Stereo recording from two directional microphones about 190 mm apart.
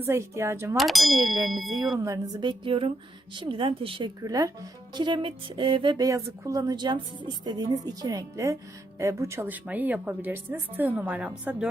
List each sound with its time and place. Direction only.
0.0 s a woman's voice: 15° right (ahead or behind)
0.8 s ding: centre (ahead or behind)
2.0 s a woman's voice: 15° right (ahead or behind)